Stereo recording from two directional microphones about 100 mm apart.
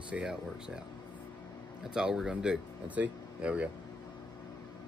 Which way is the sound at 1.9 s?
5° right (ahead or behind).